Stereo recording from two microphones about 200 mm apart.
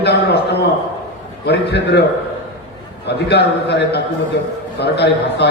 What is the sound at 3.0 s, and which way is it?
A man's voice, 55° left (ahead or behind).